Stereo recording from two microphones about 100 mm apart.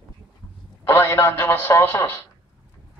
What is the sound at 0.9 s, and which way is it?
A man's voice, 25° left (ahead or behind).